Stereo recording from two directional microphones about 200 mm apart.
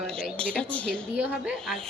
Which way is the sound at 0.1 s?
Centre (ahead or behind).